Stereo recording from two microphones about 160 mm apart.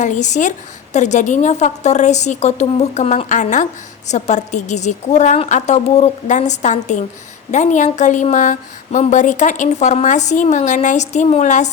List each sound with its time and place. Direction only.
0.0 s a woman's voice: 50° left (ahead or behind)